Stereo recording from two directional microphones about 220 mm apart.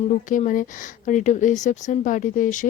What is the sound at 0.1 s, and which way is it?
A woman's voice, 35° left (ahead or behind).